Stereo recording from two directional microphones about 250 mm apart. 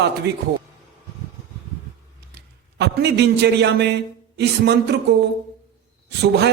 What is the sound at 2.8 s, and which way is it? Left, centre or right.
A man's voice, right.